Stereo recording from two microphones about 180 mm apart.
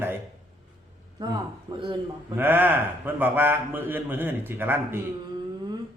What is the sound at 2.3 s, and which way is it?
A man's voice, 10° right (ahead or behind).